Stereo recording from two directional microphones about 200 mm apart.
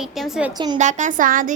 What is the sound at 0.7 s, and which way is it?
Speech, 40° right (ahead or behind).